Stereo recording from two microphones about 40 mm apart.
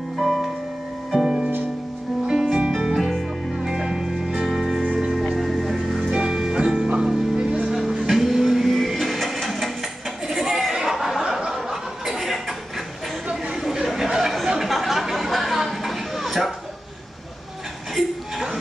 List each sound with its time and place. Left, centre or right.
0.2 s music: centre
3.5 s music: centre
6.0 s music: centre
8.1 s a sound: centre
13.6 s chatter: centre
17.9 s a sound: centre